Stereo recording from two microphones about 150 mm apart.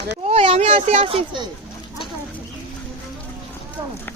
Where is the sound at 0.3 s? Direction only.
40° right (ahead or behind).